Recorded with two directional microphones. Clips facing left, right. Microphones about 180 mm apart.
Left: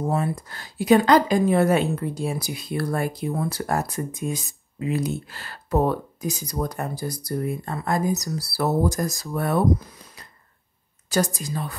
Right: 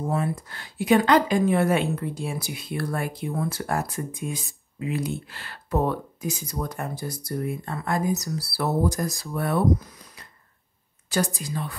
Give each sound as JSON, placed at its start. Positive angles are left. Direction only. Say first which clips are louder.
{"t": 0.1, "sound": "speech", "louder": "left 2 dB", "side_deg": 40}
{"t": 11.1, "sound": "a woman's voice", "louder": "left 2 dB", "side_deg": 45}